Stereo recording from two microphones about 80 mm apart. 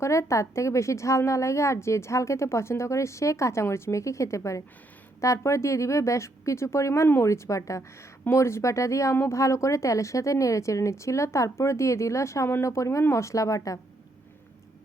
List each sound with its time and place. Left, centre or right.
0.0 s a woman's voice: left